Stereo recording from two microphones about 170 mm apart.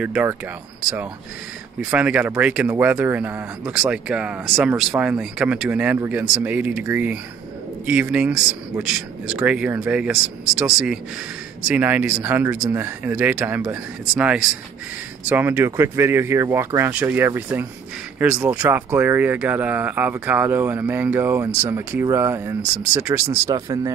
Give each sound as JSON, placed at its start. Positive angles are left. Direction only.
{"t": 0.0, "sound": "speech", "side_deg": -10}
{"t": 1.9, "sound": "speech", "side_deg": -10}